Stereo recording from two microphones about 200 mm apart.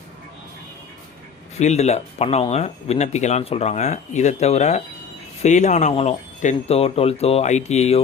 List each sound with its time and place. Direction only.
1.5 s speech: 35° left (ahead or behind)